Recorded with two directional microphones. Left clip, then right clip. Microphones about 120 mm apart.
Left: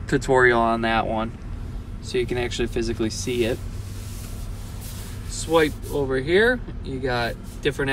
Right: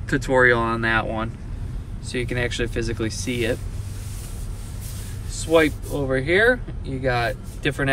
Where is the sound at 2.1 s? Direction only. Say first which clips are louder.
Left 1 dB; 40° left (ahead or behind).